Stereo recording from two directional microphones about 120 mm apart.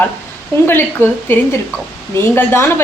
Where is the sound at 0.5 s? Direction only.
20° left (ahead or behind).